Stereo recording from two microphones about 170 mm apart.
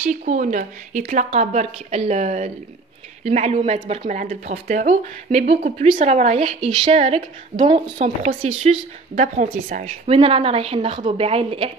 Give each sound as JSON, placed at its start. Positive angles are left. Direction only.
{"t": 0.1, "sound": "a woman's voice", "side_deg": -45}
{"t": 8.4, "sound": "a woman's voice", "side_deg": -40}
{"t": 10.0, "sound": "a woman's voice", "side_deg": -35}